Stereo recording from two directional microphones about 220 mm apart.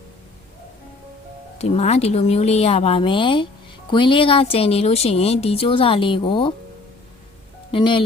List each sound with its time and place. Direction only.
1.5 s speech: 30° left (ahead or behind)
7.7 s speech: 25° left (ahead or behind)